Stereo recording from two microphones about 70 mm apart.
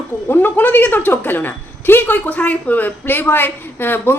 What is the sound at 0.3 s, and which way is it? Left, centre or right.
A woman's voice, left.